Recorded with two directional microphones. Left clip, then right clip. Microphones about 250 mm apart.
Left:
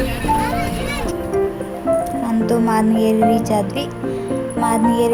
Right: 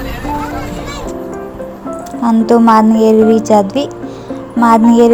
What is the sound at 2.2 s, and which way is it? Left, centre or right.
Speech, right.